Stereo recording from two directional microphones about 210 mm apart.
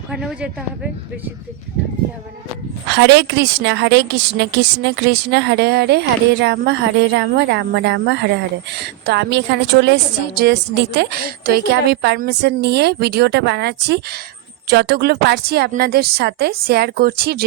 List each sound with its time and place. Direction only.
0.1 s speech: 5° right (ahead or behind)
2.9 s a woman's voice: 60° right (ahead or behind)